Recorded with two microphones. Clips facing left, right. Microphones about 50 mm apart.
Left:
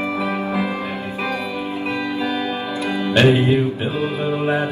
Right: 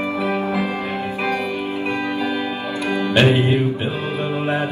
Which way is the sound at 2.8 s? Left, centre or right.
Right.